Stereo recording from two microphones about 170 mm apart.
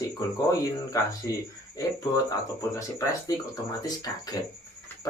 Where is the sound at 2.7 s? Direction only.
20° left (ahead or behind).